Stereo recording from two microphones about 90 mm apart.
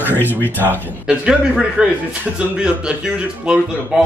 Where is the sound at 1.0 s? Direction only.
10° right (ahead or behind).